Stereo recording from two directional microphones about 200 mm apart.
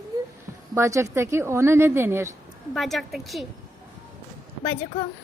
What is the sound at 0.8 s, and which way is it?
A woman's voice, 15° right (ahead or behind).